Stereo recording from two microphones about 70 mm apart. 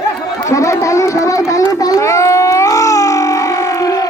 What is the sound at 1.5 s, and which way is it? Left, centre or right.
Baby cry, left.